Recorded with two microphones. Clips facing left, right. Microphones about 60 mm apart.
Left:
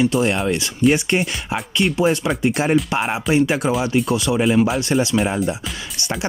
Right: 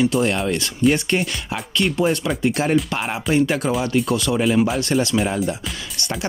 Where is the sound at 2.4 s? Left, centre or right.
Left.